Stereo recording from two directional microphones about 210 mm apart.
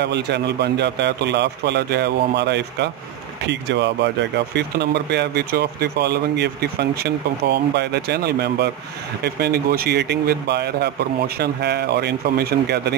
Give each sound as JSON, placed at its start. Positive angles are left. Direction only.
{"t": 0.0, "sound": "speech", "side_deg": -55}